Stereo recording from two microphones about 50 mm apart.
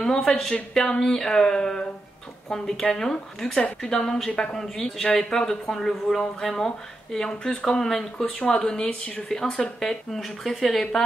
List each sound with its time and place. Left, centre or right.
0.0 s speech: centre